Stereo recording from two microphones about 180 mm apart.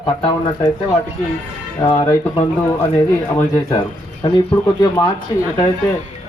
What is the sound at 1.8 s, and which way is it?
Speech, 20° left (ahead or behind).